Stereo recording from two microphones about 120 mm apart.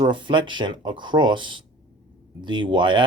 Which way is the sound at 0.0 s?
40° right (ahead or behind).